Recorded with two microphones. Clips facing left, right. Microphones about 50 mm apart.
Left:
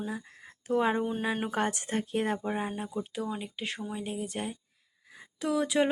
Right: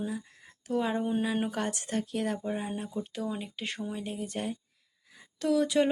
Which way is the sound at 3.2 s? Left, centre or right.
Centre.